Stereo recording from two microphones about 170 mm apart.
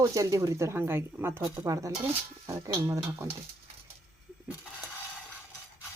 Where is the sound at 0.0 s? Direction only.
20° right (ahead or behind).